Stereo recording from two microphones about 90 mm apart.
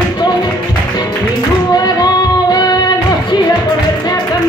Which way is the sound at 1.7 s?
45° left (ahead or behind).